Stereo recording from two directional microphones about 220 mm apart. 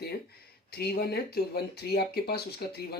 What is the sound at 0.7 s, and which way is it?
Speech, 45° left (ahead or behind).